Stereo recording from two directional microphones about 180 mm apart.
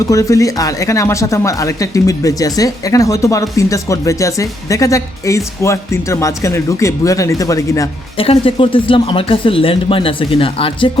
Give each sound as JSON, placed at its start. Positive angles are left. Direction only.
{"t": 0.0, "sound": "speech", "side_deg": 20}
{"t": 8.2, "sound": "speech", "side_deg": 30}